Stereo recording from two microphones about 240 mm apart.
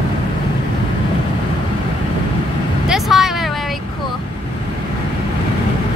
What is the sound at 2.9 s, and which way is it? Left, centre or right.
Vehicle, centre.